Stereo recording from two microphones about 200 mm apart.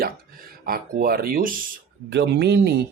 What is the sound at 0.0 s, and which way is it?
Speech, 45° right (ahead or behind).